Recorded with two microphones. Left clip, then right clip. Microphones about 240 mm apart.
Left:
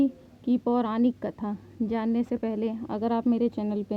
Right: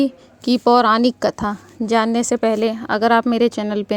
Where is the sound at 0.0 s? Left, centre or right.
Right.